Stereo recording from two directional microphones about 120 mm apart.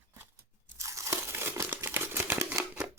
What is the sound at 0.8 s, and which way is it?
Crumpling, 25° right (ahead or behind).